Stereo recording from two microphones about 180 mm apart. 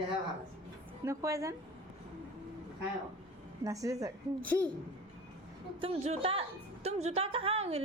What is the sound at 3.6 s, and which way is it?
Speech, 20° right (ahead or behind).